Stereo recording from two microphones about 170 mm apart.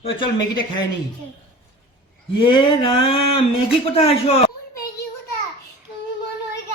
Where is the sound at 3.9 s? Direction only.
35° left (ahead or behind).